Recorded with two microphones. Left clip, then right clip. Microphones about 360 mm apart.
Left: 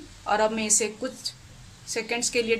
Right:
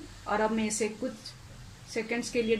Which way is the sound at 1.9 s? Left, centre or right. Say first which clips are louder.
Left 4 dB; left.